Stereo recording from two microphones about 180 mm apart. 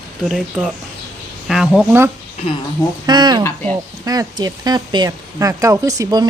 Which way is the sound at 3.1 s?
25° right (ahead or behind).